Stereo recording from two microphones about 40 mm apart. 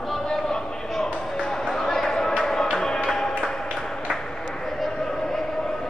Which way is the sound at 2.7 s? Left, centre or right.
Centre.